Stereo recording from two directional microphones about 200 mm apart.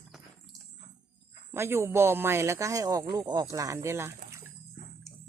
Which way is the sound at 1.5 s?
10° right (ahead or behind).